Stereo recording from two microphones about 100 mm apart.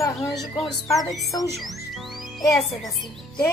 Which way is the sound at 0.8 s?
35° left (ahead or behind).